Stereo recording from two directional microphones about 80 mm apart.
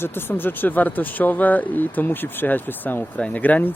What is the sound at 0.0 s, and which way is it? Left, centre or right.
Speech, left.